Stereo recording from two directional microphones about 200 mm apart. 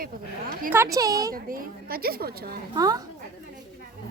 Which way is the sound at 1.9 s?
50° right (ahead or behind).